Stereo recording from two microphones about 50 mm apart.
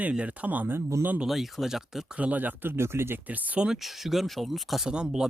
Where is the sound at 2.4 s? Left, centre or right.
Right.